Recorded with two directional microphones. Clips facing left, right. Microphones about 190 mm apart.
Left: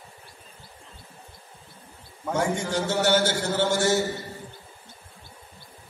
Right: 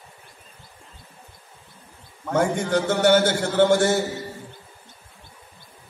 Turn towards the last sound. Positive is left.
turn(degrees=-55)  # may be behind; listen again after turning